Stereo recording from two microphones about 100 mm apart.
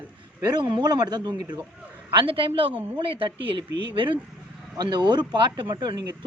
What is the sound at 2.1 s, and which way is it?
Speech, 60° right (ahead or behind).